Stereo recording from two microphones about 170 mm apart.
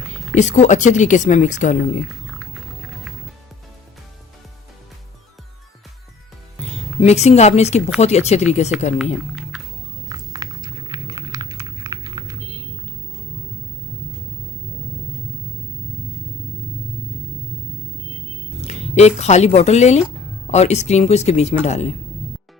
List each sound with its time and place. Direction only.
0.3 s speech: 45° left (ahead or behind)
2.0 s music: centre (ahead or behind)
7.0 s speech: 40° left (ahead or behind)
10.1 s a sound: 20° right (ahead or behind)
18.7 s speech: 40° left (ahead or behind)